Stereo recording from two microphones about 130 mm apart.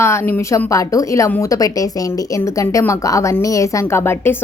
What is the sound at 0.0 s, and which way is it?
A woman's voice, 20° left (ahead or behind).